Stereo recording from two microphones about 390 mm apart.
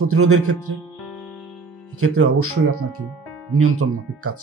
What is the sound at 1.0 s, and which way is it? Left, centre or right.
Music, centre.